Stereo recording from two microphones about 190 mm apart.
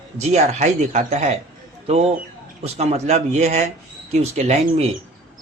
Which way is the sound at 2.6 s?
35° right (ahead or behind).